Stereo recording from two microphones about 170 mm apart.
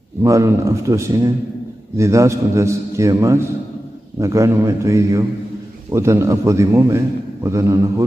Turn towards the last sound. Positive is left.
turn(degrees=-20)  # may be behind; listen again after turning